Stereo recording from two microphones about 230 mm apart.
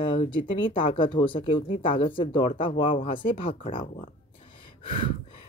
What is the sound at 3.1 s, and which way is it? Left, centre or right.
Speech, left.